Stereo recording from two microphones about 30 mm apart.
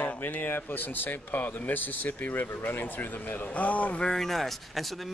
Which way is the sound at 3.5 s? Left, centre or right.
Left.